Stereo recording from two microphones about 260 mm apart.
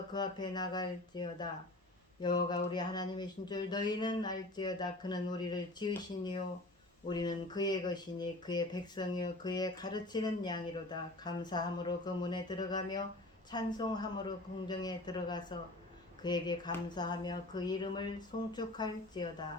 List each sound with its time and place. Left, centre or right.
0.1 s speech: centre